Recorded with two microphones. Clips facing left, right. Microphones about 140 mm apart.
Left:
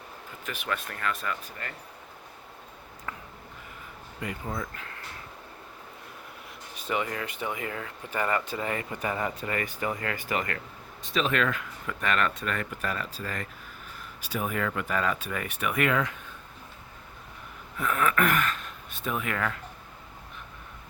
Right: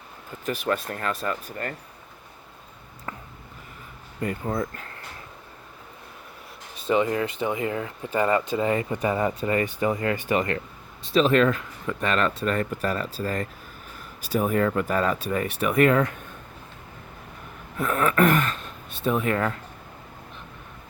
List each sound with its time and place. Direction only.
0.4 s speech: 40° right (ahead or behind)
4.2 s speech: 45° right (ahead or behind)
6.7 s speech: 25° right (ahead or behind); by 16.1 s 40° right (ahead or behind)
17.7 s speech: 40° right (ahead or behind)